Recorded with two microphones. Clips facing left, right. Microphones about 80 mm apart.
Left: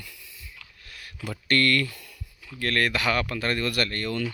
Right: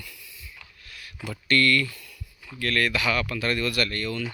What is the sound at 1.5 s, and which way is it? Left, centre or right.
Speech, left.